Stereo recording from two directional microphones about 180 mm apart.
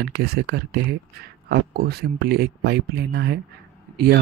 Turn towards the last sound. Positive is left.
turn(degrees=-60)  # may be behind; listen again after turning